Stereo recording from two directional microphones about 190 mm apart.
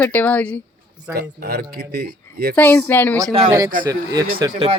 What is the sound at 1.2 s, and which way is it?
Speech, 55° right (ahead or behind).